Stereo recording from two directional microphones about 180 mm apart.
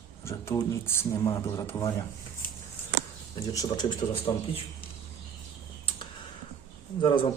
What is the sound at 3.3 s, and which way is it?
Speech, 20° left (ahead or behind).